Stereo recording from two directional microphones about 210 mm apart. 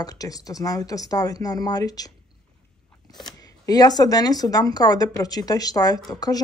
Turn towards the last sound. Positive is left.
turn(degrees=20)  # may be behind; listen again after turning